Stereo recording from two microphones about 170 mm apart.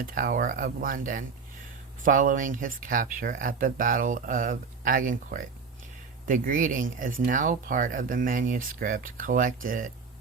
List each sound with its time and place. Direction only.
0.0 s speech: 55° right (ahead or behind)